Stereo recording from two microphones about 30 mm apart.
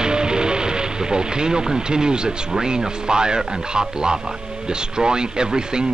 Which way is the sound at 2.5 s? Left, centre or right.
Right.